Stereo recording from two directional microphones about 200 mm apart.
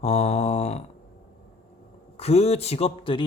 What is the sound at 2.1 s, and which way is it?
A man's voice, 30° left (ahead or behind).